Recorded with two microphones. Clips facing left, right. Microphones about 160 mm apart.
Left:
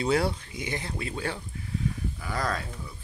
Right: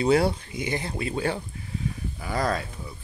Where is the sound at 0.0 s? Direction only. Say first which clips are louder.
Right 4 dB; 10° right (ahead or behind).